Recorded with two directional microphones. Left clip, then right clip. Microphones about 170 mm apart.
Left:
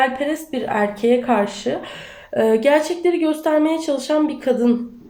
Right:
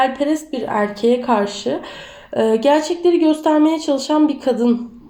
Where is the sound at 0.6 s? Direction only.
35° right (ahead or behind).